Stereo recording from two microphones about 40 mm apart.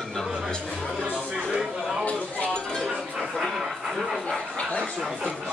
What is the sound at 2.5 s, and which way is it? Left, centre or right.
Chink, centre.